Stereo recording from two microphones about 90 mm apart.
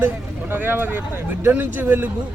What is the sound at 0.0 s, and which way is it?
Speech, 20° right (ahead or behind).